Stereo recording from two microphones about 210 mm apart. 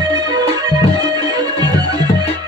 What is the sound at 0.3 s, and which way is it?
Music, 20° right (ahead or behind).